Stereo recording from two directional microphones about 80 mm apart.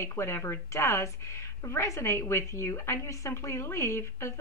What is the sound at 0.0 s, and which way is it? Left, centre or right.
Speech, left.